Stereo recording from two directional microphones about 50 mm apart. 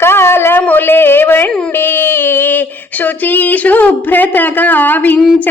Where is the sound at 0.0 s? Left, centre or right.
Left.